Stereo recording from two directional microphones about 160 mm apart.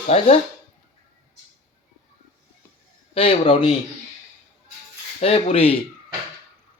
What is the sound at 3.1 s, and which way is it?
Speech, 35° left (ahead or behind).